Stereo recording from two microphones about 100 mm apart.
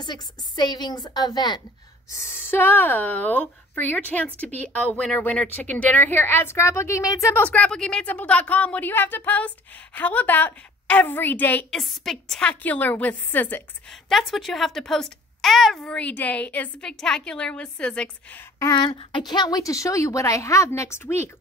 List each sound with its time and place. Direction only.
0.0 s a woman's voice: 45° left (ahead or behind)
2.1 s speech: 25° left (ahead or behind)
7.4 s speech: 15° left (ahead or behind)
11.7 s speech: centre (ahead or behind); by 13.7 s 20° left (ahead or behind)
13.8 s a child's voice: centre (ahead or behind)
16.0 s speech: 15° left (ahead or behind)
18.8 s a woman's voice: 55° left (ahead or behind); by 21.3 s 25° left (ahead or behind)